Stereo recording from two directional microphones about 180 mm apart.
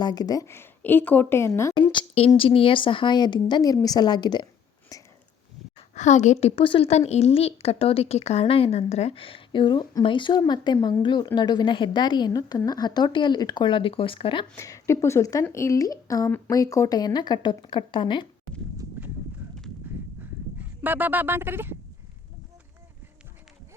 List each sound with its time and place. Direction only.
0.0 s a woman's voice: 20° left (ahead or behind)
1.7 s a woman's voice: 25° left (ahead or behind)
4.9 s a sound: 20° left (ahead or behind)
5.9 s a woman's voice: 40° left (ahead or behind)
14.5 s a woman's voice: 15° left (ahead or behind)
18.8 s horse: 10° right (ahead or behind)
20.6 s speech: 10° right (ahead or behind)